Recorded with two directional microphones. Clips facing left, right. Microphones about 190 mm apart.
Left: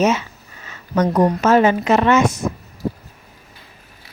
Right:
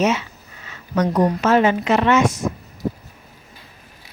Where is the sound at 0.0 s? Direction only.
45° left (ahead or behind).